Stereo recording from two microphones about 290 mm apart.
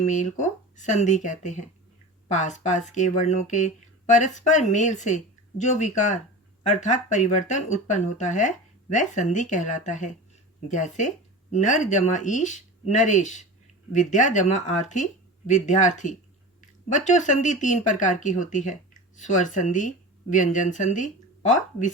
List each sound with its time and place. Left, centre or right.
0.0 s speech: left